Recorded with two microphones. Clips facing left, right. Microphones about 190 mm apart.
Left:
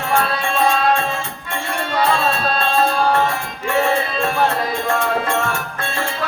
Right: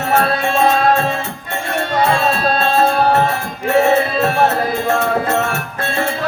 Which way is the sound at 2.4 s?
55° right (ahead or behind).